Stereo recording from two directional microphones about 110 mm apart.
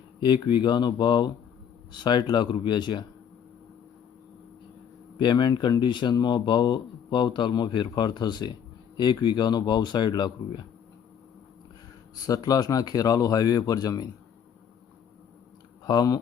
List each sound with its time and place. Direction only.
0.2 s speech: 45° left (ahead or behind)
5.2 s speech: 40° left (ahead or behind)
12.2 s speech: 35° left (ahead or behind)
15.8 s speech: 35° left (ahead or behind)